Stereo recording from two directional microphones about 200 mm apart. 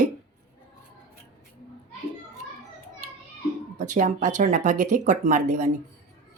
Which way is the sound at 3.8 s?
40° right (ahead or behind).